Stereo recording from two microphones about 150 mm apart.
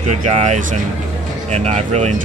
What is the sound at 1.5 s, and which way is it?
Speech, 45° right (ahead or behind).